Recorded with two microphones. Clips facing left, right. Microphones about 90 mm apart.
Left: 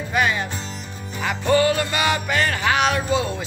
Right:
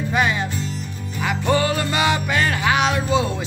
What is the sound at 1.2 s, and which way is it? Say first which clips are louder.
Music: left 2 dB; 25° right (ahead or behind).